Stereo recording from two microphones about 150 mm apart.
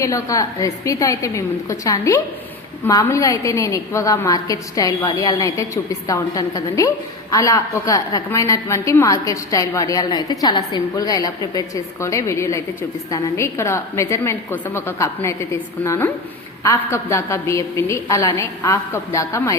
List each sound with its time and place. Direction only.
0.0 s a woman's voice: 20° left (ahead or behind)